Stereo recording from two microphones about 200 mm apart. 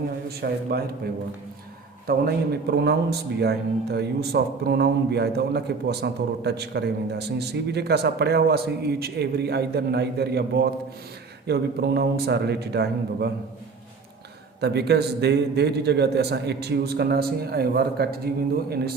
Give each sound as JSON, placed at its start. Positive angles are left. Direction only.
{"t": 0.3, "sound": "a man's voice", "side_deg": -50}
{"t": 2.0, "sound": "a man's voice", "side_deg": -50}
{"t": 14.6, "sound": "a man's voice", "side_deg": -55}